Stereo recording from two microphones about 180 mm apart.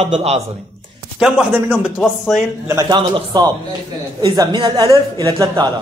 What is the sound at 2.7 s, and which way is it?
A man's voice, 20° right (ahead or behind).